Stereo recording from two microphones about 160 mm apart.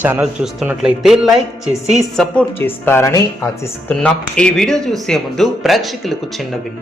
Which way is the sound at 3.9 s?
5° left (ahead or behind).